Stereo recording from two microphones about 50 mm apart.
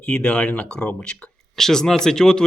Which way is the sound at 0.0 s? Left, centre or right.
Centre.